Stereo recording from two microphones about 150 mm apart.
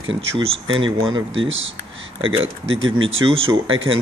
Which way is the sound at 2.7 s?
40° right (ahead or behind).